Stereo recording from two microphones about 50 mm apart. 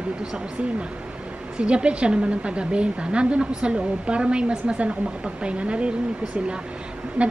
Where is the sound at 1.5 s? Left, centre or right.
Centre.